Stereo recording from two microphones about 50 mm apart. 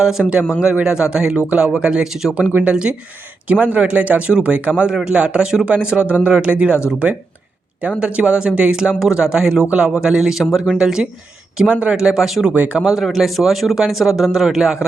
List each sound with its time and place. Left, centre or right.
0.0 s speech: centre
0.6 s speech: right
7.9 s speech: right
12.5 s speech: right
12.8 s a man's voice: centre